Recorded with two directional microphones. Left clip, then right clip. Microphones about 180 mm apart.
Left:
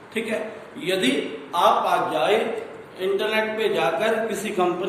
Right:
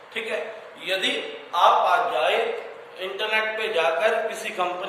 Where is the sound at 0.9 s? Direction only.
15° left (ahead or behind).